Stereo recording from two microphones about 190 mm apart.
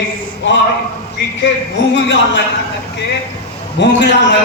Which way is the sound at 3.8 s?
65° left (ahead or behind).